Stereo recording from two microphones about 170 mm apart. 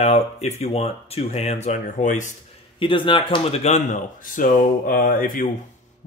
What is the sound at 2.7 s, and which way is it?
Speech, 30° left (ahead or behind).